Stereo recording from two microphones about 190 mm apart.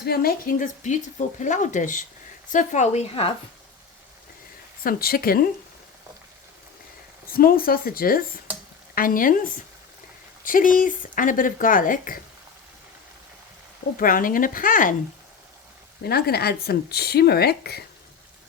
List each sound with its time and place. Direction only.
0.0 s a woman's voice: 55° left (ahead or behind); by 3.3 s 35° left (ahead or behind)
4.8 s speech: 50° left (ahead or behind)
7.3 s speech: 50° left (ahead or behind)
13.9 s speech: 45° left (ahead or behind)
16.0 s speech: 55° left (ahead or behind)